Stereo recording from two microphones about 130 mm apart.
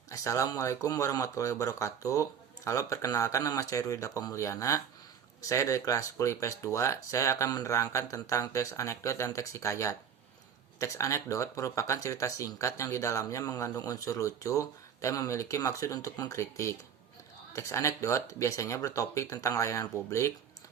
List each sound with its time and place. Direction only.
0.1 s speech: 25° left (ahead or behind)